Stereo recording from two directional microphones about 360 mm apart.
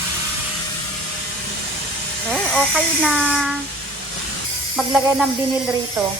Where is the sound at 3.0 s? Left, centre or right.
Centre.